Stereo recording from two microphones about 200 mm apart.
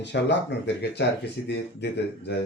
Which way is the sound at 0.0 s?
60° left (ahead or behind).